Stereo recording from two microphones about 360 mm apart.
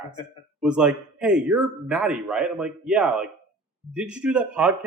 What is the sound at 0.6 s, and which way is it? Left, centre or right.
Speech, centre.